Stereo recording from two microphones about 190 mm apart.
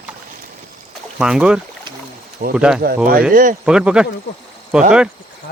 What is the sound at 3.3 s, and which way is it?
Speech, 45° right (ahead or behind).